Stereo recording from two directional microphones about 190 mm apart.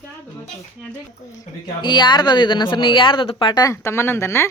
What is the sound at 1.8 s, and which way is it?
Speech, 25° left (ahead or behind).